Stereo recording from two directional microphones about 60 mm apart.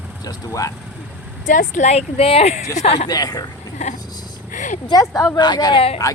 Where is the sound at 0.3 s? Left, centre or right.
Left.